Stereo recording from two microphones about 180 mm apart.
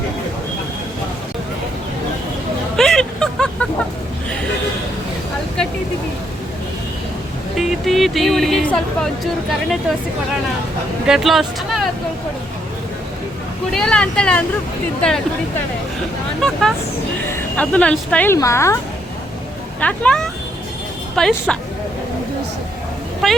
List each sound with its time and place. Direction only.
2.7 s vehicle: 5° left (ahead or behind)
7.5 s speech: centre (ahead or behind)
11.0 s speech: centre (ahead or behind)
13.7 s speech: 5° left (ahead or behind)
19.8 s speech: 5° left (ahead or behind)
23.2 s speech: centre (ahead or behind)